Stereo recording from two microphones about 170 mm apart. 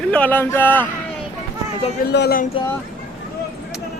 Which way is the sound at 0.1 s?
10° left (ahead or behind).